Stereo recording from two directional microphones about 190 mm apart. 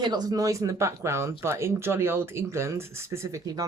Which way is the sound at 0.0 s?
20° right (ahead or behind).